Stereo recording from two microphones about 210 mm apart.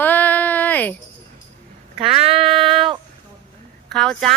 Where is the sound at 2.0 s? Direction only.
30° right (ahead or behind).